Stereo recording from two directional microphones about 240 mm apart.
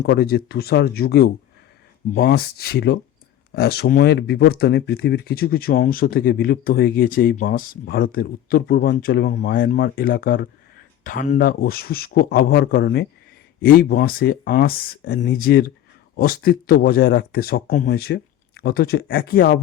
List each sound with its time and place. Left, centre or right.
0.0 s speech: left